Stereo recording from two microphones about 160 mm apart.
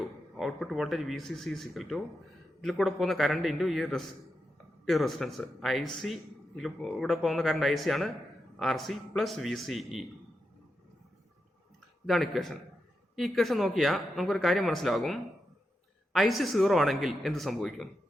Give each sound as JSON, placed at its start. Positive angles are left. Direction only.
{"t": 0.0, "sound": "speech", "side_deg": 0}
{"t": 12.0, "sound": "speech", "side_deg": 0}